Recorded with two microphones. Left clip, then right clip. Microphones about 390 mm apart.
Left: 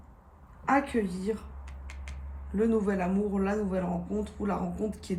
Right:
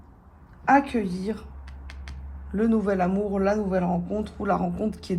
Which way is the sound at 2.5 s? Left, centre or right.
Centre.